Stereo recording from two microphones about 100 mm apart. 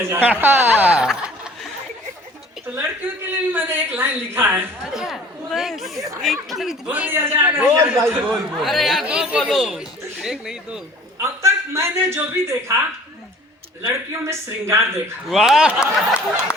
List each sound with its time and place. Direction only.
0.1 s speech: 20° right (ahead or behind)
2.6 s a woman's voice: 20° right (ahead or behind)
4.9 s speech: centre (ahead or behind)
6.8 s speech: 15° right (ahead or behind)
8.3 s speech: centre (ahead or behind)
9.0 s speech: 10° right (ahead or behind)
9.4 s speech: centre (ahead or behind)
11.2 s a man's voice: 30° right (ahead or behind)
13.8 s a man's voice: 25° right (ahead or behind)
15.3 s speech: 5° right (ahead or behind)